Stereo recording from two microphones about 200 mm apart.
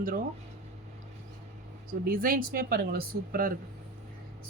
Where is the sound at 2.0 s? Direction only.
45° right (ahead or behind).